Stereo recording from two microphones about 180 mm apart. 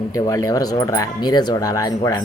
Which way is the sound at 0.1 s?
20° left (ahead or behind).